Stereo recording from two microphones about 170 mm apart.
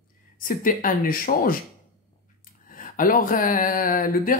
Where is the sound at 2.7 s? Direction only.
55° left (ahead or behind).